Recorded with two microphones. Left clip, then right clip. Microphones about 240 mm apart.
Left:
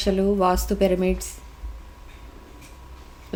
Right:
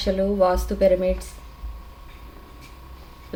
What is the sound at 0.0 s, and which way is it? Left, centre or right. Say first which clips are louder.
Speech: right 1 dB; left.